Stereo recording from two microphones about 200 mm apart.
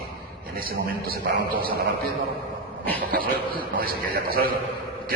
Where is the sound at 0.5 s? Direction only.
45° right (ahead or behind).